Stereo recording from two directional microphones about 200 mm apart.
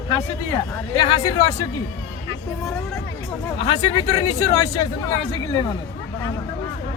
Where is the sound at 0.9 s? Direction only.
25° left (ahead or behind).